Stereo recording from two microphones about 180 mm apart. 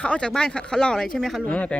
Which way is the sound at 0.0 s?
5° left (ahead or behind).